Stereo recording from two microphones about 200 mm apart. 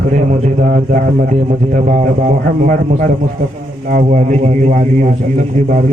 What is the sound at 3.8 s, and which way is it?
A man's voice, 40° right (ahead or behind).